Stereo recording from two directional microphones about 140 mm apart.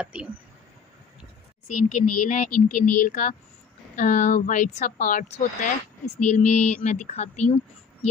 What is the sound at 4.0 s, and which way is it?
Speech, 65° left (ahead or behind).